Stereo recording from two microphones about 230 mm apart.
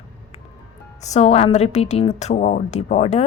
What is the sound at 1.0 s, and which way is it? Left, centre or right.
Speech, left.